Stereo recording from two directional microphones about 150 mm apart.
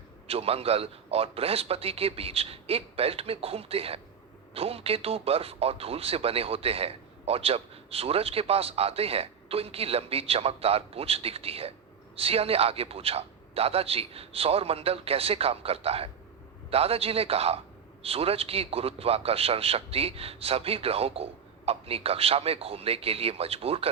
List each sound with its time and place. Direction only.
0.3 s speech: 40° right (ahead or behind)